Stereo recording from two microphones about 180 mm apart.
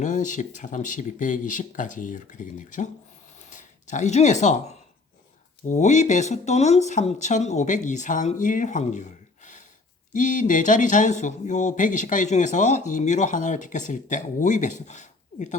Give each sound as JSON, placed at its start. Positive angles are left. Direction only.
{"t": 0.0, "sound": "speech", "side_deg": 45}